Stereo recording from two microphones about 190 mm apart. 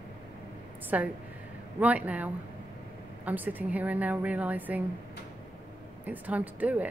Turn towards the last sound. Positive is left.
turn(degrees=-10)  # may be behind; listen again after turning